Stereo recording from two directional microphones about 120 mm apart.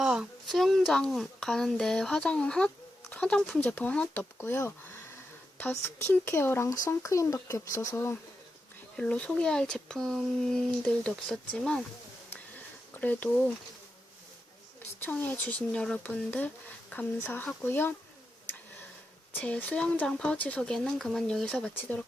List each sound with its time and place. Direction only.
0.0 s speech: 5° right (ahead or behind); by 8.2 s 20° left (ahead or behind)
9.0 s speech: 10° left (ahead or behind)
13.0 s speech: 15° left (ahead or behind)
15.0 s speech: 15° left (ahead or behind)
19.3 s speech: 15° left (ahead or behind)